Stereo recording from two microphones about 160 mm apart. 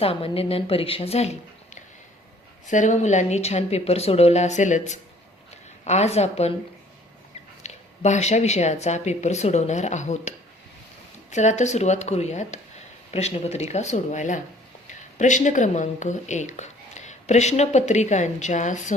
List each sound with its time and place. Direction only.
0.0 s speech: 35° left (ahead or behind)
7.6 s speech: 45° left (ahead or behind)